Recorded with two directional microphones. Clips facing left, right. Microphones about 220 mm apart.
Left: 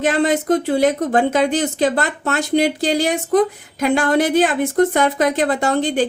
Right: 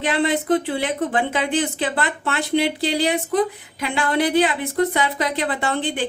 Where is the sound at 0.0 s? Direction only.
45° left (ahead or behind).